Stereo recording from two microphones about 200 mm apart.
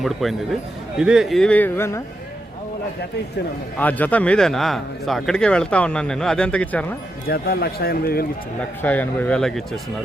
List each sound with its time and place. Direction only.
0.0 s speech: centre (ahead or behind)
3.8 s speech: 10° left (ahead or behind)
7.3 s a man's voice: 50° left (ahead or behind)
8.8 s speech: 10° left (ahead or behind)